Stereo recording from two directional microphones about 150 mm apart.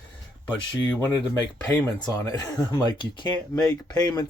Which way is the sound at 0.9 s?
20° left (ahead or behind).